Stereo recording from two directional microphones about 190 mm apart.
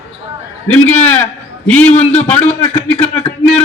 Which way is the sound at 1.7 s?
10° left (ahead or behind).